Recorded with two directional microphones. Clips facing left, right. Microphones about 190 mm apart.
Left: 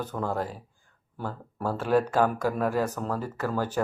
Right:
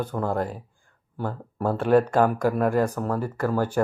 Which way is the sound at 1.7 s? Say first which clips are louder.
Right 5 dB; 55° right (ahead or behind).